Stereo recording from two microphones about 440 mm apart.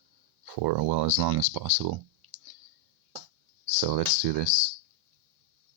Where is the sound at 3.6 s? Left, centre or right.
Right.